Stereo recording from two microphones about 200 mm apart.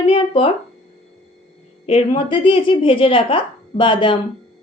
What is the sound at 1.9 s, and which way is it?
A woman's voice, 30° left (ahead or behind).